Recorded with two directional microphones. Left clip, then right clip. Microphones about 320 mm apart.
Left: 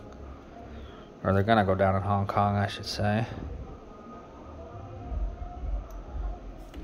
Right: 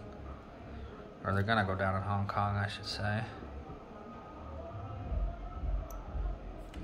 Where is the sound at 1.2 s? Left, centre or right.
Left.